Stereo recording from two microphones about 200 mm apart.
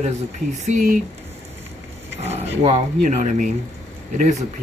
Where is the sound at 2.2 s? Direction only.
30° right (ahead or behind).